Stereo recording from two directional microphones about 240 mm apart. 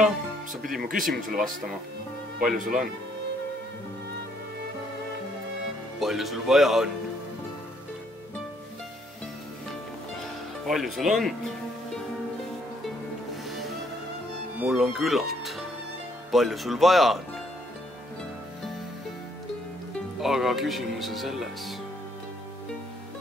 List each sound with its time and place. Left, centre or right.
0.7 s speech: right
5.9 s speech: centre
10.7 s speech: centre
14.6 s speech: centre
20.2 s speech: centre